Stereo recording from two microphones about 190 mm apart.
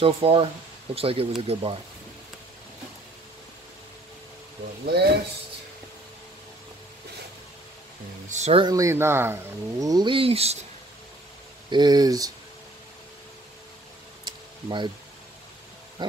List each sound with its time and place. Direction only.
0.0 s speech: 30° right (ahead or behind)
4.8 s speech: 60° right (ahead or behind)
8.3 s speech: 35° right (ahead or behind)
8.6 s speech: 15° right (ahead or behind); by 10.6 s 30° right (ahead or behind)
11.7 s speech: 20° right (ahead or behind)
14.2 s a sound: 25° right (ahead or behind)
16.0 s a sound: 25° right (ahead or behind)